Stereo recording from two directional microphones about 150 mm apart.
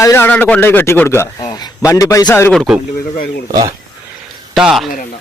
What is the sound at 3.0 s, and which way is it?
Speech, 70° left (ahead or behind).